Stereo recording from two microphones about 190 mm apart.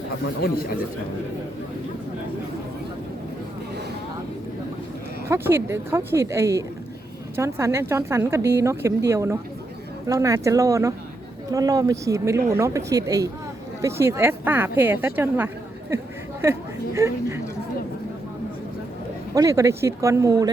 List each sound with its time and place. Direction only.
0.4 s speech: 55° left (ahead or behind)
5.3 s a woman's voice: 15° right (ahead or behind)
19.3 s speech: 15° right (ahead or behind)